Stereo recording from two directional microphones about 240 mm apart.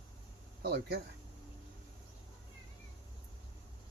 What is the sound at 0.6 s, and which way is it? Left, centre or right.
Speech, right.